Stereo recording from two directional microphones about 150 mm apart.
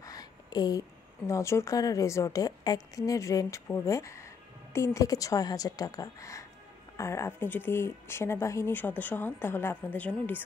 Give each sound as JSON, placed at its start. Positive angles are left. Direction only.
{"t": 0.0, "sound": "a woman's voice", "side_deg": 25}